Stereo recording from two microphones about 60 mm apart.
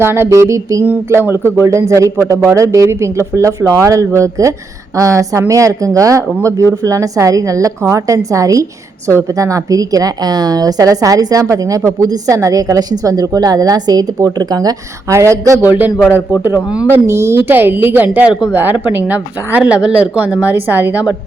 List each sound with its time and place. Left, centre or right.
0.0 s speech: right
0.3 s a woman's voice: right
1.1 s a man's voice: right
11.4 s a woman's voice: right
15.1 s a woman's voice: right
15.6 s speech: right
16.9 s a man's voice: right
17.5 s a woman's voice: right